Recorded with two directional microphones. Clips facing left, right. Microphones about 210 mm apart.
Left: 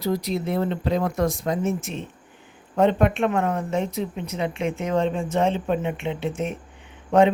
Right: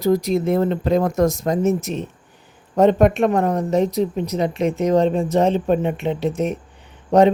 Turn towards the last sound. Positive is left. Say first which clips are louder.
# right 3 dB
turn(degrees=-35)  # may be behind; listen again after turning